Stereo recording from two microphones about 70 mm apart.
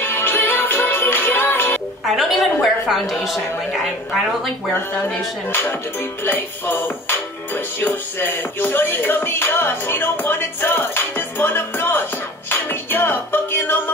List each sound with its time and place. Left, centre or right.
0.0 s music: left
2.0 s a woman's voice: centre
4.7 s music: left